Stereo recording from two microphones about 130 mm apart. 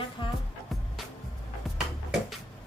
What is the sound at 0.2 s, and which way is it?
Music, 40° left (ahead or behind).